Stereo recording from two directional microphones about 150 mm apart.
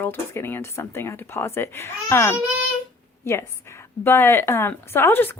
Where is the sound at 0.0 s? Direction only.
15° left (ahead or behind).